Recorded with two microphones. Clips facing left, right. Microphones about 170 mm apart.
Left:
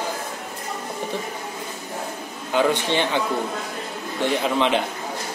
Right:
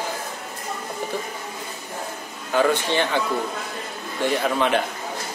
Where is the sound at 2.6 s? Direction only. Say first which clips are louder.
Even; 20° left (ahead or behind).